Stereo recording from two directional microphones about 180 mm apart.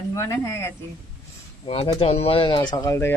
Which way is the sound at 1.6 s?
30° left (ahead or behind).